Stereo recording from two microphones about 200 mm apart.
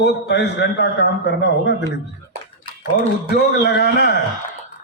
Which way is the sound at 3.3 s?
55° left (ahead or behind).